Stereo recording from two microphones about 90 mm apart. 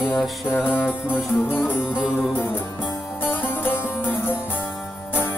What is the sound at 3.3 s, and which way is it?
Music, 20° left (ahead or behind).